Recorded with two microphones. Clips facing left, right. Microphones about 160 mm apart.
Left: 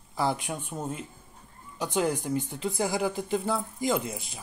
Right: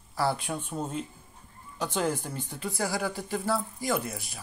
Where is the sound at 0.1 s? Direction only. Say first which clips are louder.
Even; 20° left (ahead or behind).